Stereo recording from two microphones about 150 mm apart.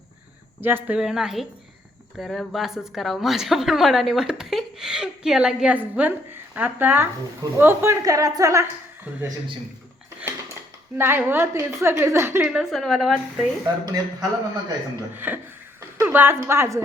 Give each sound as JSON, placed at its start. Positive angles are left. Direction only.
{"t": 0.6, "sound": "a woman's voice", "side_deg": -15}
{"t": 10.9, "sound": "a woman's voice", "side_deg": -15}
{"t": 13.8, "sound": "a man's voice", "side_deg": -25}
{"t": 15.1, "sound": "a woman's voice", "side_deg": -10}